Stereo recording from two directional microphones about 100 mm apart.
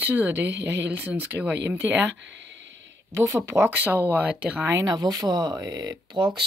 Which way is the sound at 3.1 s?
30° right (ahead or behind).